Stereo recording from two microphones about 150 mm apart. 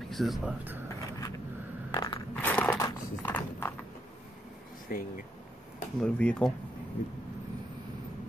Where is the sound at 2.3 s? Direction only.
10° left (ahead or behind).